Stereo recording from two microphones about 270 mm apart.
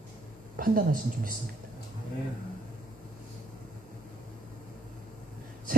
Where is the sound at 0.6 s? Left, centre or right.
Right.